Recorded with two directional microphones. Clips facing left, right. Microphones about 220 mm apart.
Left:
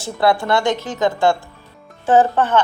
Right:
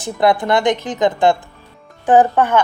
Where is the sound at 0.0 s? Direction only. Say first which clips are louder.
Right 2 dB; 20° right (ahead or behind).